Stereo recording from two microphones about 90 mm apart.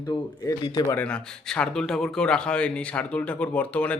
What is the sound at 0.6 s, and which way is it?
Speech, 50° left (ahead or behind).